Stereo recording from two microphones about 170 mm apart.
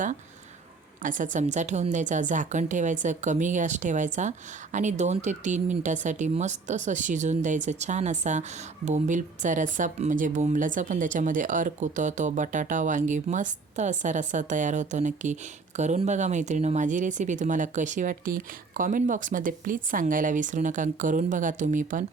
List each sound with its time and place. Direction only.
1.0 s a woman's voice: 50° right (ahead or behind)